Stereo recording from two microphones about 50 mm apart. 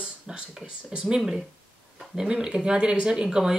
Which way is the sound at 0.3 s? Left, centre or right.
Centre.